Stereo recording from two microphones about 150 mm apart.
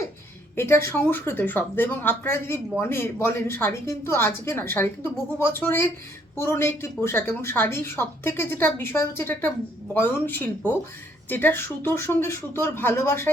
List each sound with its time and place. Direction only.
0.5 s a woman's voice: 15° left (ahead or behind)